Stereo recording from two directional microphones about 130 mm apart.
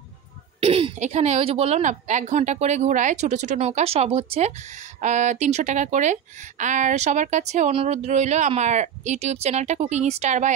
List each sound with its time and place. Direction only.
0.6 s a sound: 50° right (ahead or behind)
0.9 s speech: 60° right (ahead or behind); by 1.8 s 45° right (ahead or behind)
1.8 s speech: 70° right (ahead or behind)
5.0 s speech: 65° right (ahead or behind)
7.7 s speech: 50° right (ahead or behind)